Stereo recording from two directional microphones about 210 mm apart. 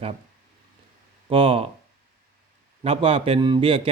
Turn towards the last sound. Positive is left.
turn(degrees=-25)  # may be behind; listen again after turning